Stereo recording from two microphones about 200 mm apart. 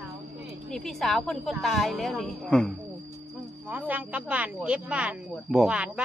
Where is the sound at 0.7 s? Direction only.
Centre (ahead or behind).